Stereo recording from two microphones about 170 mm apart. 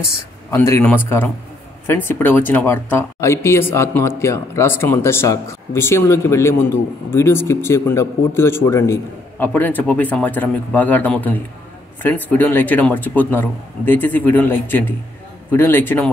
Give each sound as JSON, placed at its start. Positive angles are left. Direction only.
{"t": 0.6, "sound": "speech", "side_deg": 10}